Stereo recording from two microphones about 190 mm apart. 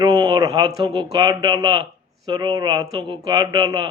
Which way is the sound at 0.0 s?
25° right (ahead or behind).